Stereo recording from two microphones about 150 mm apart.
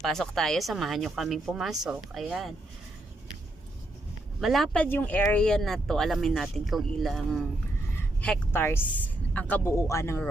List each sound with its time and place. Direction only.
0.0 s speech: centre (ahead or behind)
4.4 s speech: centre (ahead or behind)
7.9 s a woman's voice: 10° left (ahead or behind)